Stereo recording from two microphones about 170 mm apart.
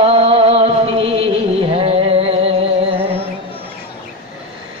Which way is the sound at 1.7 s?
35° right (ahead or behind).